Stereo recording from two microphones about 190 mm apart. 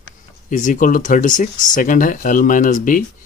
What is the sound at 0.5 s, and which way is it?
Speech, 40° left (ahead or behind).